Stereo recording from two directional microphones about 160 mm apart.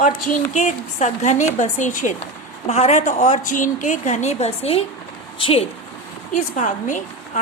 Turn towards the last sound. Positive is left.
turn(degrees=50)  # may be behind; listen again after turning